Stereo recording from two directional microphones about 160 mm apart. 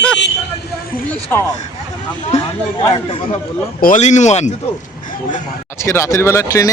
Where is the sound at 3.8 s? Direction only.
50° left (ahead or behind).